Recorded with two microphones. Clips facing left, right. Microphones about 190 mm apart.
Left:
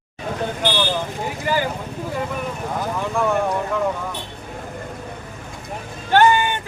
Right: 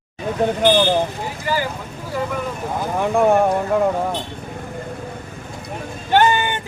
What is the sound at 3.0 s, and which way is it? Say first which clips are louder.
Speech: right 7 dB; 55° right (ahead or behind).